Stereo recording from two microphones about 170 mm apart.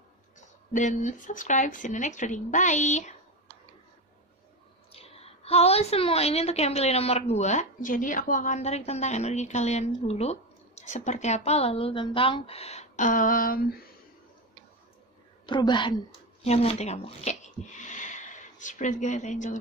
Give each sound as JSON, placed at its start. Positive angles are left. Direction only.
{"t": 0.4, "sound": "speech", "side_deg": 45}
{"t": 4.9, "sound": "a woman's voice", "side_deg": 35}
{"t": 15.4, "sound": "a woman's voice", "side_deg": 25}
{"t": 16.4, "sound": "speech", "side_deg": 40}